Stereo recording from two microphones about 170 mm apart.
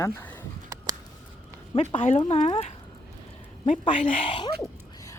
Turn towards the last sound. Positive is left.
turn(degrees=30)  # may be behind; listen again after turning